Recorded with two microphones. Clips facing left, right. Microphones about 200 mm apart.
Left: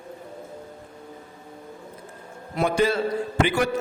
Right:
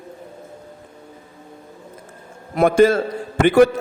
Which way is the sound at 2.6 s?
50° right (ahead or behind).